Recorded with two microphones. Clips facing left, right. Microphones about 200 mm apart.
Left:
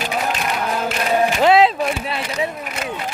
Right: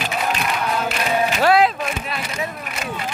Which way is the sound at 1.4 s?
25° left (ahead or behind).